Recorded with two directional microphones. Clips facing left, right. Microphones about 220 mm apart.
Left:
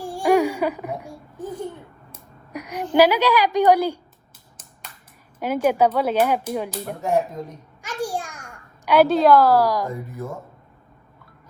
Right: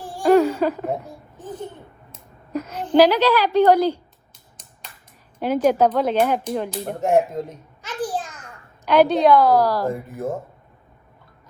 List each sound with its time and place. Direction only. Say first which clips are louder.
0.0 s a sound: right 3 dB; 10° left (ahead or behind)
1.0 s a woman's voice: left 3 dB; 10° left (ahead or behind)
5.4 s speech: right 2 dB; 10° left (ahead or behind)
6.8 s speech: right 5 dB; 45° right (ahead or behind)
7.8 s a sound: right 1 dB; 10° left (ahead or behind)
10.1 s speech: right 5 dB; 50° right (ahead or behind)